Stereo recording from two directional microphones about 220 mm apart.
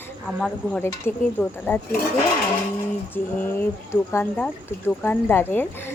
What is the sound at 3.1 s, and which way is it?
Speech, 10° left (ahead or behind).